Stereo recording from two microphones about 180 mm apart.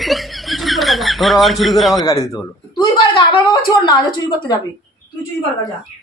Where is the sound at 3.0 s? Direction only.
25° left (ahead or behind).